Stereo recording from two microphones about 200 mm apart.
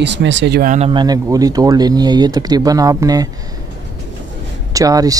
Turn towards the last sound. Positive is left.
turn(degrees=-15)  # may be behind; listen again after turning